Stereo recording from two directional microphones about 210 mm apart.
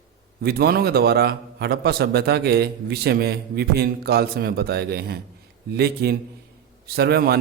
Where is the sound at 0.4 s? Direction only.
50° right (ahead or behind).